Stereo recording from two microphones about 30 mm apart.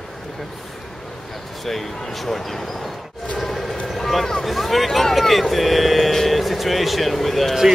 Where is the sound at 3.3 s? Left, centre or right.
Centre.